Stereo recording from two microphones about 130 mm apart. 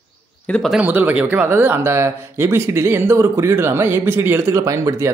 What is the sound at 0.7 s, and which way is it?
Speech, 15° right (ahead or behind).